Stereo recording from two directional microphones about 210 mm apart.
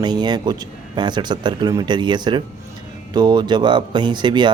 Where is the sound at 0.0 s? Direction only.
20° right (ahead or behind).